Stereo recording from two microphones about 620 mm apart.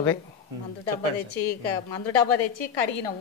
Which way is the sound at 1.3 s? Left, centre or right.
Left.